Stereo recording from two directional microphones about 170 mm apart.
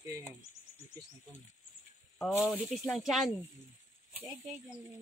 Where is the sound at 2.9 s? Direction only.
Centre (ahead or behind).